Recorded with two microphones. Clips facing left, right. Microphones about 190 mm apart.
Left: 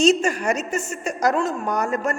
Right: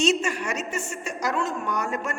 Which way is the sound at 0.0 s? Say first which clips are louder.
Left 5 dB; 35° left (ahead or behind).